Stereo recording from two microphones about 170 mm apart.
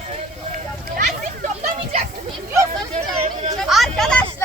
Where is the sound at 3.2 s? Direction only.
40° right (ahead or behind).